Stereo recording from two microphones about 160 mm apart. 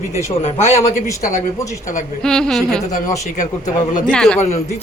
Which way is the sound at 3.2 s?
50° left (ahead or behind).